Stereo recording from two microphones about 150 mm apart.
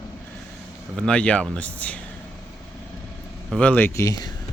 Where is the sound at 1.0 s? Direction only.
5° left (ahead or behind).